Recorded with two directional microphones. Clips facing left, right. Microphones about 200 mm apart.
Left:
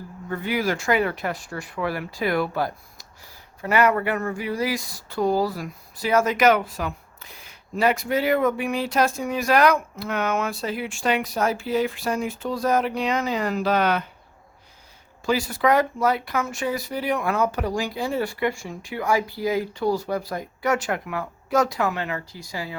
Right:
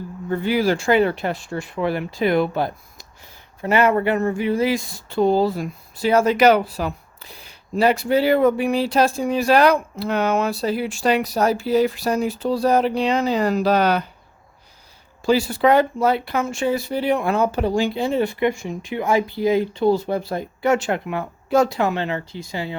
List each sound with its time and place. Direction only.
0.3 s speech: 30° right (ahead or behind)
15.3 s speech: 30° right (ahead or behind)